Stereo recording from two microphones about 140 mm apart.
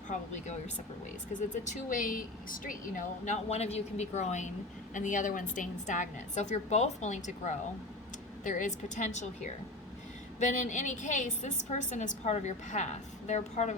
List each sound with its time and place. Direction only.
0.1 s a woman's voice: 55° left (ahead or behind)
1.7 s a woman's voice: 70° left (ahead or behind); by 13.7 s 55° left (ahead or behind)